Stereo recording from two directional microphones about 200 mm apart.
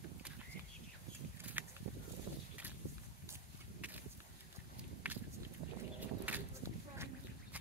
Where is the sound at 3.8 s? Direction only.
5° right (ahead or behind).